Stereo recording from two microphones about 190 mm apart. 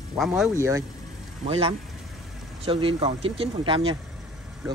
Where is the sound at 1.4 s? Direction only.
30° right (ahead or behind).